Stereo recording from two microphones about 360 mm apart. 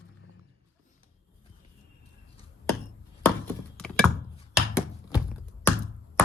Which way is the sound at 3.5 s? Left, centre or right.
Centre.